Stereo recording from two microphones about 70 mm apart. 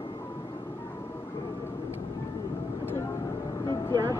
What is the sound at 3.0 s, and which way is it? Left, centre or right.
Music, left.